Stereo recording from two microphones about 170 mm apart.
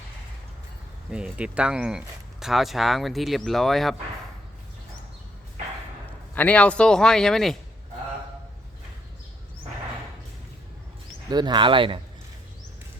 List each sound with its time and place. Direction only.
1.1 s speech: 5° right (ahead or behind)
6.3 s speech: 10° left (ahead or behind)
11.3 s speech: 25° right (ahead or behind)